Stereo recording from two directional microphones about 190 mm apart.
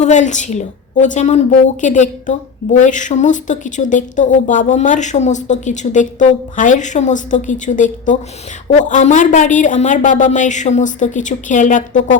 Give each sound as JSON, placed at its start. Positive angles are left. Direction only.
{"t": 0.0, "sound": "a woman's voice", "side_deg": 40}